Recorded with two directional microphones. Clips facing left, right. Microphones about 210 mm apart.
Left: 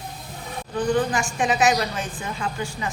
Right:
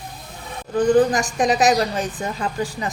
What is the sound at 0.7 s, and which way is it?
A woman's voice, 40° right (ahead or behind).